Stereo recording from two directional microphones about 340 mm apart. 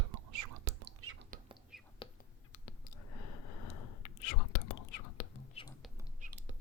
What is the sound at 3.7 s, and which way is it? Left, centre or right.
Whispering, left.